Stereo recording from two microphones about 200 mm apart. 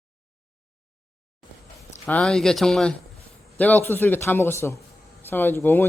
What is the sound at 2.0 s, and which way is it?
A man's voice, 5° left (ahead or behind).